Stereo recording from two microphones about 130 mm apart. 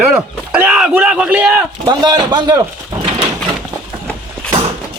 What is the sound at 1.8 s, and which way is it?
Speech, 30° right (ahead or behind).